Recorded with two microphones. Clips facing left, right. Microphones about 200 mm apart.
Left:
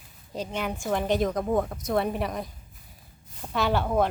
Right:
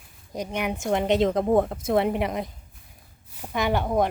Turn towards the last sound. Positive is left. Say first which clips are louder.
# right 1 dB
turn(degrees=-15)  # may be behind; listen again after turning